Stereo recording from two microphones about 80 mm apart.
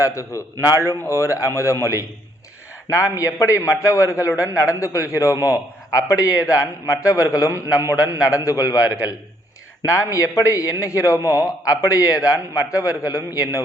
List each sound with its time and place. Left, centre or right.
0.0 s a man's voice: left